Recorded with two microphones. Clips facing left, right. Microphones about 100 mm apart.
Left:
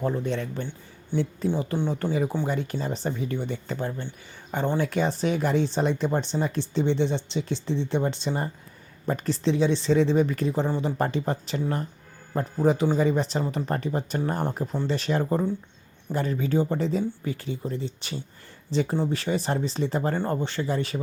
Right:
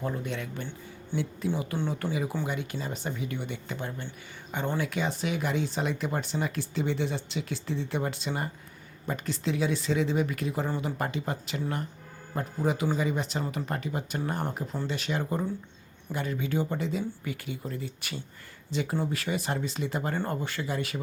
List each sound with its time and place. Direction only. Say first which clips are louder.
0.0 s speech: left 6 dB; 30° left (ahead or behind)
1.1 s speech: left 5 dB; 45° left (ahead or behind)
1.5 s speech: left 3 dB; 30° left (ahead or behind)